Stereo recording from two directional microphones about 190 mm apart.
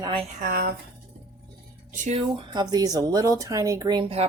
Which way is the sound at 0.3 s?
50° right (ahead or behind).